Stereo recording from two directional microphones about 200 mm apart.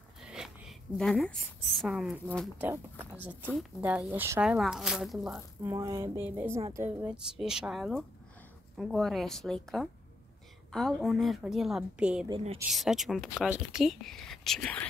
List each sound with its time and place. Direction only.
0.3 s a woman's voice: centre (ahead or behind)
5.6 s speech: 15° right (ahead or behind)
12.3 s a woman's voice: 30° right (ahead or behind)
12.7 s speech: centre (ahead or behind)